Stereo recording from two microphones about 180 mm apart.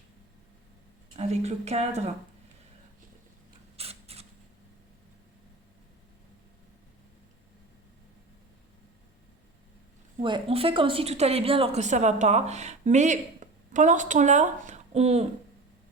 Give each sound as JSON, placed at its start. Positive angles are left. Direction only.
{"t": 1.1, "sound": "a woman's voice", "side_deg": -35}
{"t": 3.8, "sound": "a sound", "side_deg": -35}
{"t": 10.2, "sound": "a woman's voice", "side_deg": -30}